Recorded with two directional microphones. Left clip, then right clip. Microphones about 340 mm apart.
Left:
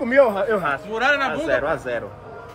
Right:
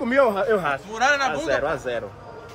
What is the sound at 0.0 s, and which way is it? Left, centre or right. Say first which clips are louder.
Speech: left 3 dB; centre.